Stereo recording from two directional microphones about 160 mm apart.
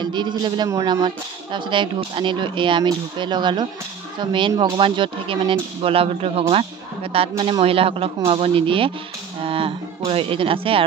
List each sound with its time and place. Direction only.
0.0 s speech: 30° right (ahead or behind)